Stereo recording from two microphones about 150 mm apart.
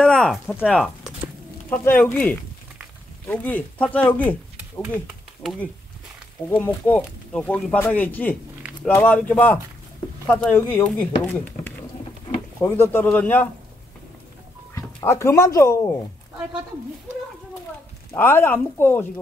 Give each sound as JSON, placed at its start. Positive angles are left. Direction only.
{"t": 0.0, "sound": "a sound", "side_deg": 5}
{"t": 0.6, "sound": "speech", "side_deg": 0}
{"t": 2.0, "sound": "speech", "side_deg": 10}
{"t": 5.0, "sound": "speech", "side_deg": 0}
{"t": 6.5, "sound": "speech", "side_deg": 15}
{"t": 15.0, "sound": "speech", "side_deg": 20}
{"t": 18.1, "sound": "speech", "side_deg": 15}